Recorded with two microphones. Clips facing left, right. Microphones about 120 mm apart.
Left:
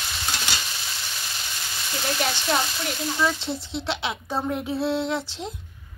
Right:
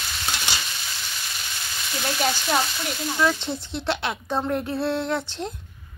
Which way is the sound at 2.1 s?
5° right (ahead or behind).